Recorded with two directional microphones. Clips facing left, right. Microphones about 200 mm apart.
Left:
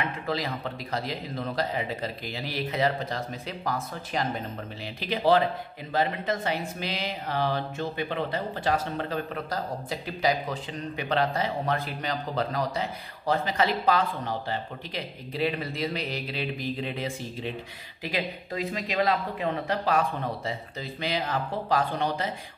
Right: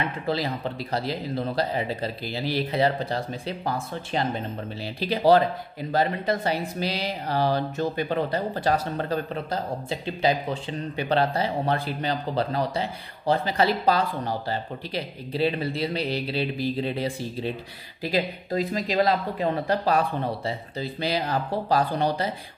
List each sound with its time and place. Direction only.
0.3 s speech: 30° right (ahead or behind)
9.5 s speech: 25° right (ahead or behind)